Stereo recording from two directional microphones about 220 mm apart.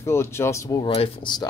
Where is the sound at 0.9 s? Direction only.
25° left (ahead or behind).